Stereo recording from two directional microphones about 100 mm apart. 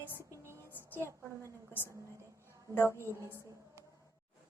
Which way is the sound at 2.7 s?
25° left (ahead or behind).